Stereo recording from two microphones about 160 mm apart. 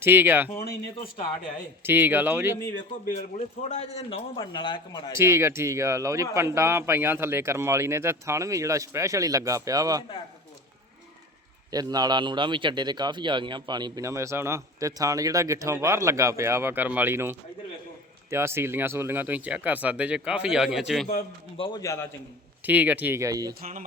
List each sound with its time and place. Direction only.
0.0 s speech: 15° right (ahead or behind)
1.8 s speech: 10° right (ahead or behind)
3.1 s a man's voice: 45° left (ahead or behind); by 5.1 s 25° left (ahead or behind)
5.1 s speech: 15° right (ahead or behind)
11.7 s speech: 25° right (ahead or behind); by 21.1 s centre (ahead or behind)
21.6 s a man's voice: 25° left (ahead or behind)
22.6 s speech: 10° right (ahead or behind)